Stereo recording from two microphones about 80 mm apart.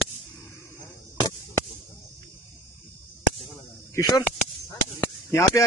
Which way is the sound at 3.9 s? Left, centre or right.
Left.